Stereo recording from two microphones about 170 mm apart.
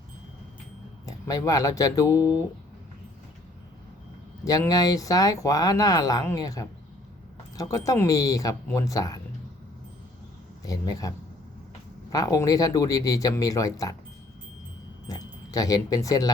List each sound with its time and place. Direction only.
1.0 s speech: 20° left (ahead or behind)
4.4 s speech: 20° left (ahead or behind)
10.7 s speech: 20° left (ahead or behind)
12.1 s speech: 20° left (ahead or behind)
15.0 s speech: 20° left (ahead or behind)